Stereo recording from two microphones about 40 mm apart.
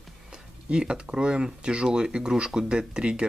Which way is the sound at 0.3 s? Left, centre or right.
Right.